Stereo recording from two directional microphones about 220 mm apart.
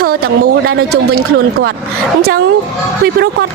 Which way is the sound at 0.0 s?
45° right (ahead or behind).